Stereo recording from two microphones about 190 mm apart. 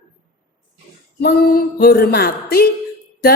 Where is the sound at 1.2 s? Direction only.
55° left (ahead or behind).